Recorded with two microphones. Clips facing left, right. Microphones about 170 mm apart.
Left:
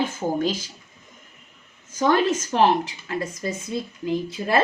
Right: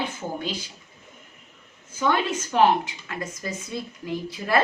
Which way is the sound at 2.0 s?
40° left (ahead or behind).